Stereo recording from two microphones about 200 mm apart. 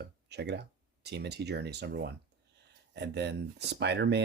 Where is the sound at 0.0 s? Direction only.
55° right (ahead or behind).